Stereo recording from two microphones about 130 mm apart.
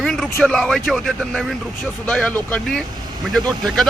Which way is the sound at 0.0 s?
Centre (ahead or behind).